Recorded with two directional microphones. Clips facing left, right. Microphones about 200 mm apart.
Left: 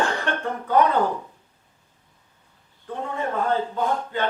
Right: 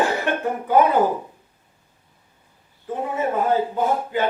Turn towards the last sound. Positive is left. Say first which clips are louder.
# right 3 dB
turn(degrees=-10)  # may be behind; listen again after turning